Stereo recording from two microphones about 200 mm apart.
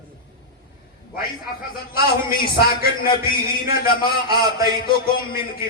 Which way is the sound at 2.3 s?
45° left (ahead or behind).